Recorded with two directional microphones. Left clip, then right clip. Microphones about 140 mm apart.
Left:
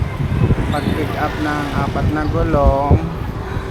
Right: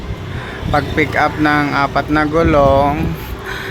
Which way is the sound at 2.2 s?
30° right (ahead or behind).